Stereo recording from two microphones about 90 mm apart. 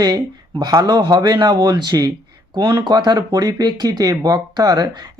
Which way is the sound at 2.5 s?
60° right (ahead or behind).